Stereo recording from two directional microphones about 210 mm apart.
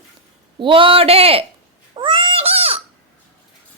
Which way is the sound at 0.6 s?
25° right (ahead or behind).